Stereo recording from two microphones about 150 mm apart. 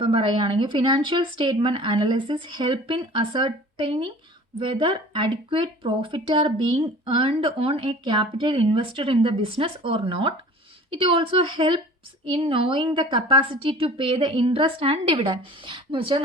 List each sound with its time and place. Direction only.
0.0 s speech: 35° right (ahead or behind)